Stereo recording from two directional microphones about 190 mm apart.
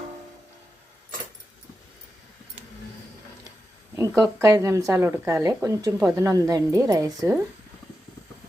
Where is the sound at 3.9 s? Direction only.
15° right (ahead or behind).